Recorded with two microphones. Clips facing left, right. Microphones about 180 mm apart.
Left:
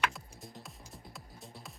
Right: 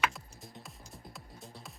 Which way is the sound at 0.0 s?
Centre (ahead or behind).